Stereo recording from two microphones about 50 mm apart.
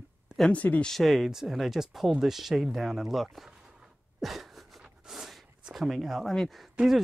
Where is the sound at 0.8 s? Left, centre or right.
Centre.